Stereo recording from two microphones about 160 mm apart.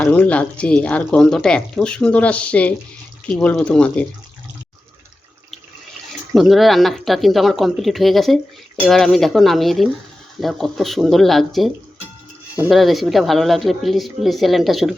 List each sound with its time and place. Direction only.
0.0 s speech: 10° left (ahead or behind)
6.3 s speech: centre (ahead or behind)
12.7 s speech: centre (ahead or behind)